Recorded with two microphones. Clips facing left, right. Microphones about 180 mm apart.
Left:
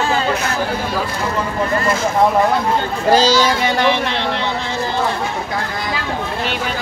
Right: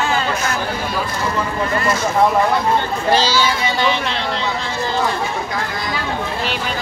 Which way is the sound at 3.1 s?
45° left (ahead or behind).